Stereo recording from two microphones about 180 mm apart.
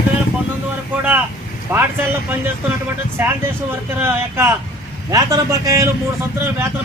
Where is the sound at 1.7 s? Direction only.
10° right (ahead or behind).